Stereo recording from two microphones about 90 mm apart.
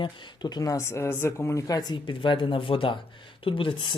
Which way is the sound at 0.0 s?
50° left (ahead or behind).